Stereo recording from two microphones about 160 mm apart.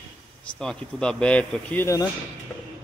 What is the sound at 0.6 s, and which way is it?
Speech, 5° left (ahead or behind).